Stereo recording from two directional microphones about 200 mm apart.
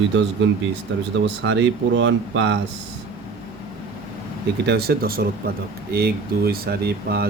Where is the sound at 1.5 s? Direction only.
65° right (ahead or behind).